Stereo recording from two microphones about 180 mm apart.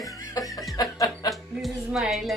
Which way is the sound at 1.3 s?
Centre (ahead or behind).